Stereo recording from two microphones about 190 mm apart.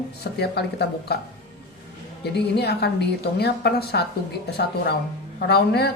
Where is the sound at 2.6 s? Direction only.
60° left (ahead or behind).